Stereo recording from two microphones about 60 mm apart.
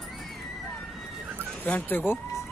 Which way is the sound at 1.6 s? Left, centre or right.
Left.